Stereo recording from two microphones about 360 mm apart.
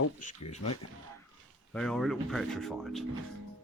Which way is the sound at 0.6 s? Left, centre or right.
Left.